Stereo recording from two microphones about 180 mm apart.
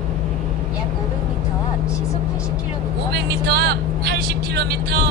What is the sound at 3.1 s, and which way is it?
Vehicle, 65° right (ahead or behind).